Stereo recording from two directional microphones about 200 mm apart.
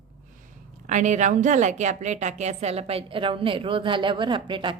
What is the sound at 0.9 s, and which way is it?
A woman's voice, 35° right (ahead or behind).